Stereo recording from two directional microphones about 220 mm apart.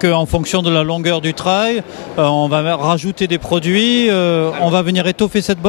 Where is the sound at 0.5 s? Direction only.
10° left (ahead or behind).